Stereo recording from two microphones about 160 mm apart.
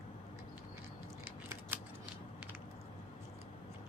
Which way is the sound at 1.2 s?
15° right (ahead or behind).